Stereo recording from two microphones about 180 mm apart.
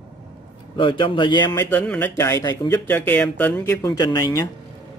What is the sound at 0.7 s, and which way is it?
A man's voice, 30° left (ahead or behind).